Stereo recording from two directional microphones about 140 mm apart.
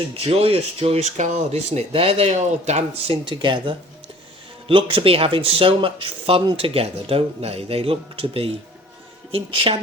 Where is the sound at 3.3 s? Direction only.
35° right (ahead or behind).